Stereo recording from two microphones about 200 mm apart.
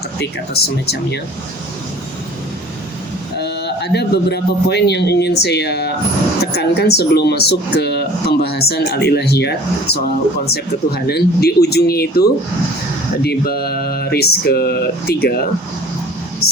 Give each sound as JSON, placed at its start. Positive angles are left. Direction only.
{"t": 0.2, "sound": "speech", "side_deg": 55}
{"t": 3.3, "sound": "a man's voice", "side_deg": 55}